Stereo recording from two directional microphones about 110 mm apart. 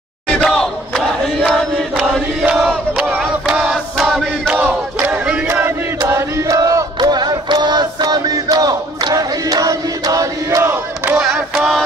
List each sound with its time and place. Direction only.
0.3 s battle cry: 5° left (ahead or behind)
4.6 s battle cry: 15° right (ahead or behind)
6.0 s battle cry: 25° right (ahead or behind)
10.6 s battle cry: 20° right (ahead or behind)
11.1 s a sound: 5° right (ahead or behind)